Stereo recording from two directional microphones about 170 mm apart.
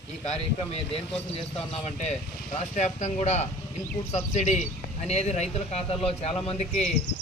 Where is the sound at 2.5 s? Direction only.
45° left (ahead or behind).